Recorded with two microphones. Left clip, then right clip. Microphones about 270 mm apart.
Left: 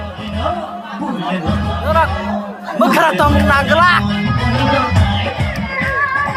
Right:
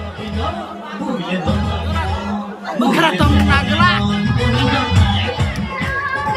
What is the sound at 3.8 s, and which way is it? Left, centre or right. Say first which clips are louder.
Music: left 3 dB; centre.